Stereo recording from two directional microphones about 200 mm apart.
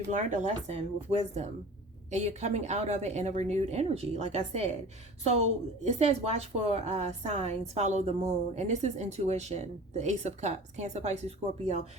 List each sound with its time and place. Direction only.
0.1 s a woman's voice: 40° right (ahead or behind)